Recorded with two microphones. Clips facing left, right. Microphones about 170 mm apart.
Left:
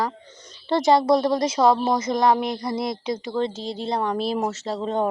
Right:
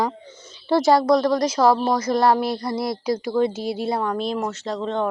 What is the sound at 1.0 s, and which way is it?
Speech, 25° left (ahead or behind).